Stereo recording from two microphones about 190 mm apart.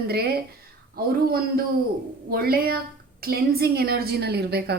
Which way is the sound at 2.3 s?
55° right (ahead or behind).